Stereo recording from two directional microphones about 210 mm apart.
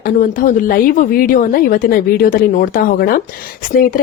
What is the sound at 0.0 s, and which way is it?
Speech, 40° left (ahead or behind).